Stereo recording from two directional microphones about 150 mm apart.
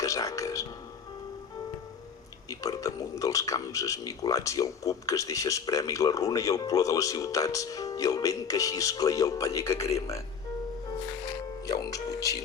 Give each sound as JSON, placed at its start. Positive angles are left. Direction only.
{"t": 0.0, "sound": "a man's voice", "side_deg": 20}
{"t": 2.5, "sound": "a man's voice", "side_deg": 20}
{"t": 11.6, "sound": "speech", "side_deg": 25}